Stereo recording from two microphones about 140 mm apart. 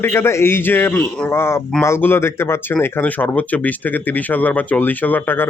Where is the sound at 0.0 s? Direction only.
15° left (ahead or behind).